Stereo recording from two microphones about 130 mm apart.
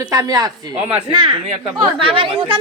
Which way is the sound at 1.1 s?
40° right (ahead or behind).